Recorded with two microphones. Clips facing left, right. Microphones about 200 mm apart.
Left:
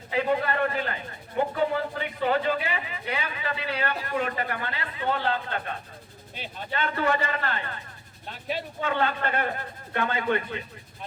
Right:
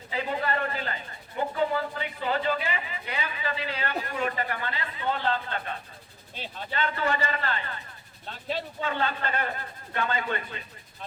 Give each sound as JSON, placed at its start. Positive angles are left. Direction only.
{"t": 0.1, "sound": "speech", "side_deg": 55}
{"t": 8.8, "sound": "speech", "side_deg": 55}